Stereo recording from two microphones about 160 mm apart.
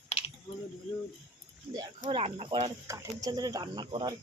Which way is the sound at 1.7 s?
30° right (ahead or behind).